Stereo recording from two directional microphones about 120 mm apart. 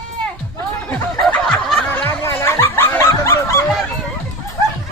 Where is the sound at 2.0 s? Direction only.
20° left (ahead or behind).